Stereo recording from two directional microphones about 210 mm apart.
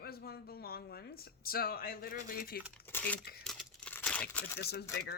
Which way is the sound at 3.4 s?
Centre (ahead or behind).